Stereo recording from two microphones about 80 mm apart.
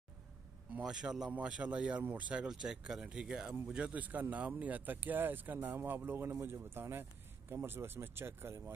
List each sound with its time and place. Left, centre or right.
0.8 s speech: centre; by 8.7 s right